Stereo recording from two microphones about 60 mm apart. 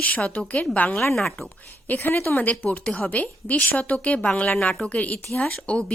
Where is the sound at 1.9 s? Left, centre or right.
Left.